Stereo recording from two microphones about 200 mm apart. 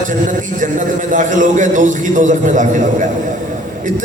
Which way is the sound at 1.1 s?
40° right (ahead or behind).